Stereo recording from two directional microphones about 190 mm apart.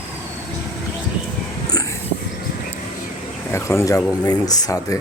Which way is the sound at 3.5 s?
15° left (ahead or behind).